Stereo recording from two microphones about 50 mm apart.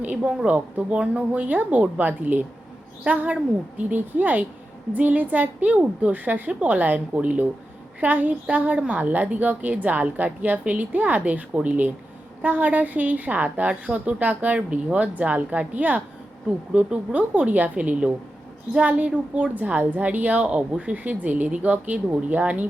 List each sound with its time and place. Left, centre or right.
0.0 s a woman's voice: right
16.5 s a woman's voice: right